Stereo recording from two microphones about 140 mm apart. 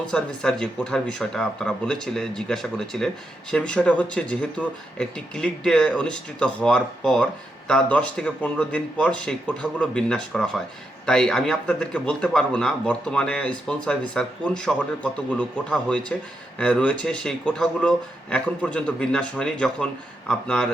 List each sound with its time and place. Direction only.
0.1 s a man's voice: 5° left (ahead or behind)